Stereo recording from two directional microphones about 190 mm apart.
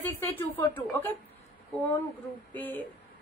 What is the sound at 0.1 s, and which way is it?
A woman's voice, 10° left (ahead or behind).